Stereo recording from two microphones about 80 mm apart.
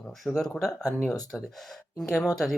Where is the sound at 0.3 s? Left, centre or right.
Centre.